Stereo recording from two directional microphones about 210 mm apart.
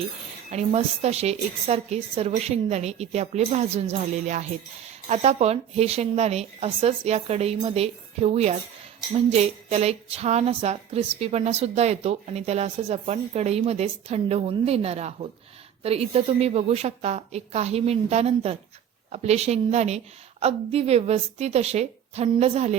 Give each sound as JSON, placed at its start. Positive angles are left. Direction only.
{"t": 0.5, "sound": "a woman's voice", "side_deg": -30}